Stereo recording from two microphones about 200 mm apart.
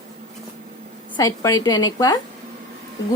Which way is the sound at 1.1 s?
15° left (ahead or behind).